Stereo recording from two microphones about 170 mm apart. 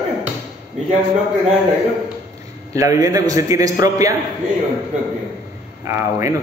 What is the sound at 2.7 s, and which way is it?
Speech, 20° right (ahead or behind).